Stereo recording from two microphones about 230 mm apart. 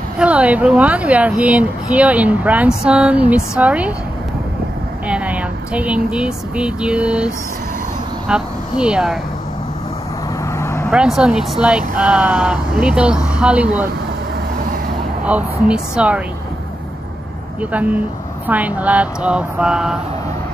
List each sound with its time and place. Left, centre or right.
0.2 s a woman's voice: centre
5.0 s a woman's voice: centre
8.3 s a woman's voice: centre
10.6 s vehicle: centre
10.9 s a woman's voice: centre
15.2 s a woman's voice: centre
17.6 s a woman's voice: centre